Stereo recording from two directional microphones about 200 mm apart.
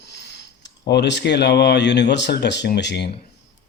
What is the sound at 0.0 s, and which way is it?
Speech, 60° left (ahead or behind).